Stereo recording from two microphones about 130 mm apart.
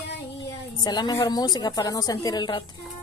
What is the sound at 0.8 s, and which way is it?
A woman's voice, 35° left (ahead or behind).